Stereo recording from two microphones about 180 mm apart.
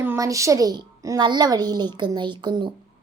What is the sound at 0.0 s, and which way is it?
A woman's voice, 15° right (ahead or behind).